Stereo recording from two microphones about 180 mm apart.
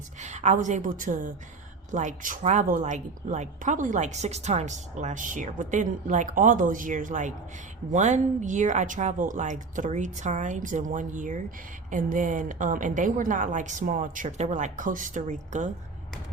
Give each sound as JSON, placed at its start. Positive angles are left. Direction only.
{"t": 0.2, "sound": "a woman's voice", "side_deg": -40}